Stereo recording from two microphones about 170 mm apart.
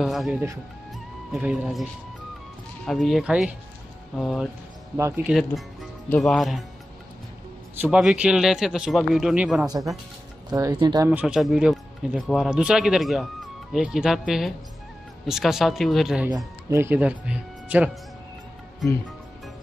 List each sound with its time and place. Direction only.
0.0 s speech: centre (ahead or behind)
2.9 s speech: centre (ahead or behind)
4.9 s speech: 15° right (ahead or behind)
5.3 s speech: centre (ahead or behind)
7.8 s speech: 5° right (ahead or behind)
9.7 s speech: 20° right (ahead or behind)
11.1 s speech: 5° right (ahead or behind)
16.7 s speech: 10° right (ahead or behind)